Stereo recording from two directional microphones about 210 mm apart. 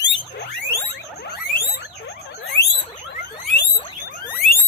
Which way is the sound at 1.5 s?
50° left (ahead or behind).